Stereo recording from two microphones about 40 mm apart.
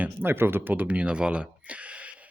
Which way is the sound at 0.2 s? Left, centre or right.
Right.